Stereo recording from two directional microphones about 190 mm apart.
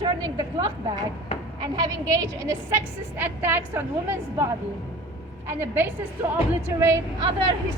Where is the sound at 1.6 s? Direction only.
20° right (ahead or behind).